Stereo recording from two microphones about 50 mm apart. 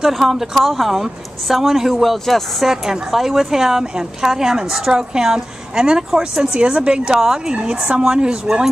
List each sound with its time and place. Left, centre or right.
0.0 s a woman's voice: centre